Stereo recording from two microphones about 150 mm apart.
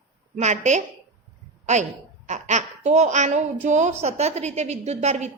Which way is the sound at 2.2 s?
50° right (ahead or behind).